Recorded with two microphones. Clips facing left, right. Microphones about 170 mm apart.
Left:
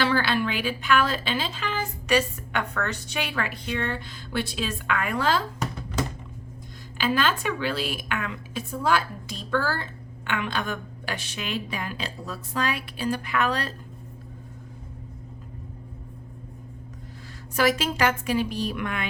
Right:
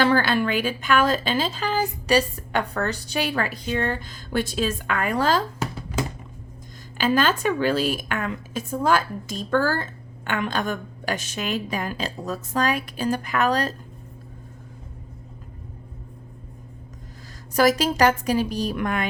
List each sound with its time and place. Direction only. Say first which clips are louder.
0.0 s a woman's voice: right 4 dB; 45° right (ahead or behind)
5.5 s a sound: right 1 dB; 5° right (ahead or behind)
7.0 s a woman's voice: right 4 dB; 45° right (ahead or behind)
17.5 s a woman's voice: right 4 dB; 40° right (ahead or behind)